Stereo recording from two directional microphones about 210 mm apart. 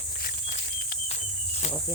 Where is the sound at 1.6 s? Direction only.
35° left (ahead or behind).